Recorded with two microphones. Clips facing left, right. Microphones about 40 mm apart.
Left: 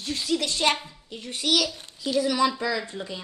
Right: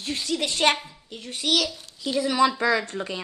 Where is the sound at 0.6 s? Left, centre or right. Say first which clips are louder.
Right 3 dB; right.